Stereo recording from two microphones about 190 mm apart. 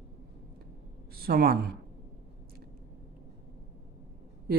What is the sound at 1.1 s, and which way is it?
Speech, 55° right (ahead or behind).